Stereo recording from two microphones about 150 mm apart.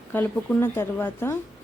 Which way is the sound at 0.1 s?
15° left (ahead or behind).